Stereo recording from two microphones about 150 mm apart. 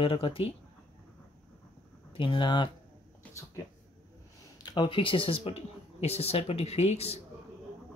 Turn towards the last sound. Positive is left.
turn(degrees=45)  # may be behind; listen again after turning